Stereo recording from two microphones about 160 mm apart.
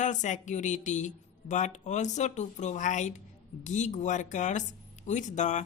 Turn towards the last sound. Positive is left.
turn(degrees=50)  # may be behind; listen again after turning